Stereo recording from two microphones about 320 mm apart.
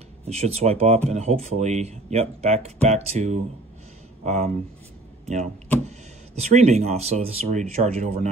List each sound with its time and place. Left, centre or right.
0.2 s speech: centre